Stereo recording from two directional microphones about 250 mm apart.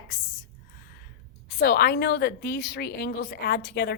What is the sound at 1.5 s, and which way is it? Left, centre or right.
A woman's voice, left.